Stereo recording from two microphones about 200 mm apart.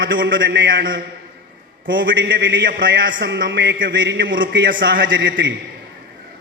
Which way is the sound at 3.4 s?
65° right (ahead or behind).